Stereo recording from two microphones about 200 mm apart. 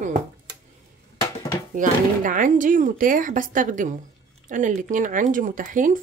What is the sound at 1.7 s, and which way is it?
Speech, 40° right (ahead or behind).